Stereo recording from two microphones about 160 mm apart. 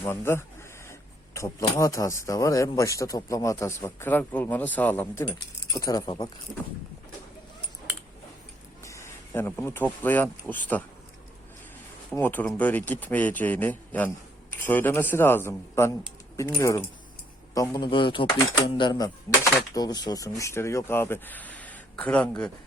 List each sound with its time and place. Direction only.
0.0 s speech: 15° left (ahead or behind)
5.2 s speech: 20° left (ahead or behind)
8.8 s speech: 20° left (ahead or behind)
12.1 s a man's voice: 10° left (ahead or behind)